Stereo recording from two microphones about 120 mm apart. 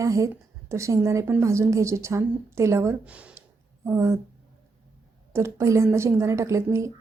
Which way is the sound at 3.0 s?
10° right (ahead or behind).